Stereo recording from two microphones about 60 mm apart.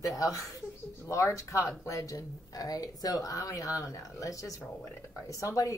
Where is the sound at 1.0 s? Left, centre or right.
Left.